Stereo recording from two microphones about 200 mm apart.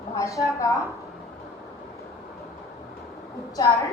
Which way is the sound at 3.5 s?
15° left (ahead or behind).